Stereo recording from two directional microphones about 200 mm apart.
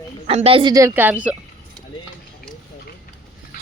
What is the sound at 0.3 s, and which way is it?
A woman's voice, 30° right (ahead or behind).